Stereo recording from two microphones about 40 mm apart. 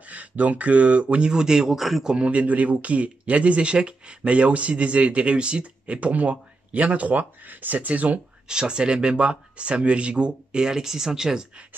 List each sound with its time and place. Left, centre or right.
0.0 s speech: right
1.2 s speech: centre
1.8 s speech: centre
2.2 s speech: right
8.5 s speech: right